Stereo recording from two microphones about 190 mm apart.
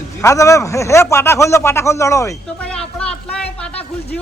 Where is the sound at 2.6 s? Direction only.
5° left (ahead or behind).